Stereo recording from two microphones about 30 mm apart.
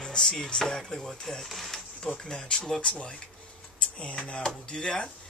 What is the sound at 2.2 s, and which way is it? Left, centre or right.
Speech, left.